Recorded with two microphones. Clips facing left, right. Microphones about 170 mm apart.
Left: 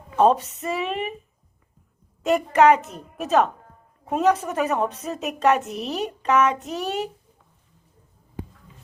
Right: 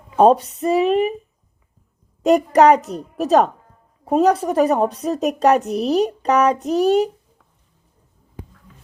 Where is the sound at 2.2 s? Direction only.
40° right (ahead or behind).